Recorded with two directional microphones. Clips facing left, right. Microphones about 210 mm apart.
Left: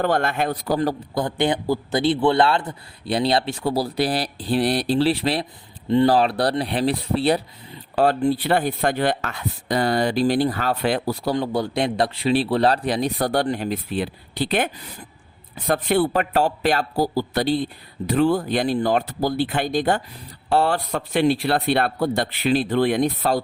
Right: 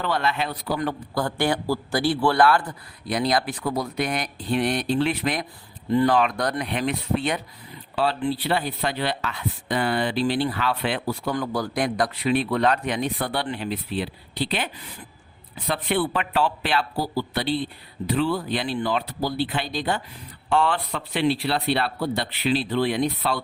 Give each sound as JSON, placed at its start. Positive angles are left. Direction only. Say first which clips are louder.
{"t": 0.0, "sound": "a man's voice", "louder": "left 4 dB", "side_deg": 50}
{"t": 1.1, "sound": "a man's voice", "louder": "even", "side_deg": 20}
{"t": 8.0, "sound": "a man's voice", "louder": "left 5 dB", "side_deg": 45}
{"t": 11.3, "sound": "a man's voice", "louder": "left 3 dB", "side_deg": 25}